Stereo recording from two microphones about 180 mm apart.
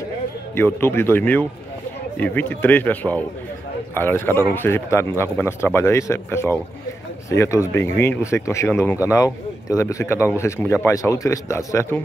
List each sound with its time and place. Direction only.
0.6 s a man's voice: 10° left (ahead or behind)